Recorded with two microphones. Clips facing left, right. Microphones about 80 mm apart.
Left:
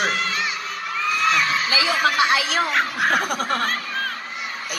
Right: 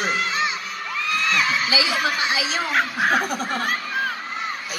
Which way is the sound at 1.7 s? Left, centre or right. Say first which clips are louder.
Left 2 dB; left.